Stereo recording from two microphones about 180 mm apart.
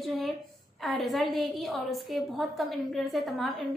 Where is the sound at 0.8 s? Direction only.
Centre (ahead or behind).